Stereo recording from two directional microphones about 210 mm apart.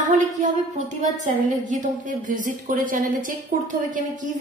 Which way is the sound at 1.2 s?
35° right (ahead or behind).